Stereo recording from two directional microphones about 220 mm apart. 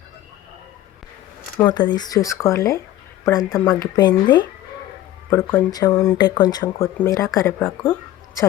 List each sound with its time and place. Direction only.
1.5 s speech: 20° left (ahead or behind)
3.9 s speech: 20° left (ahead or behind)